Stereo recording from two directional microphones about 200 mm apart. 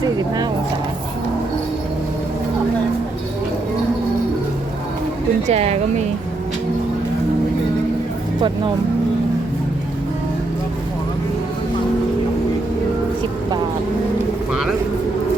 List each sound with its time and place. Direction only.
0.0 s speech: 20° right (ahead or behind)
5.5 s speech: 30° right (ahead or behind)
8.4 s speech: 25° right (ahead or behind)
14.5 s speech: centre (ahead or behind)